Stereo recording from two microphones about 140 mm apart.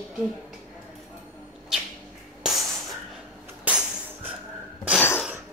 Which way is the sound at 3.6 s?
10° right (ahead or behind).